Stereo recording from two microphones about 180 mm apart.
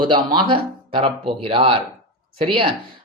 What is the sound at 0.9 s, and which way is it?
Speech, 35° right (ahead or behind).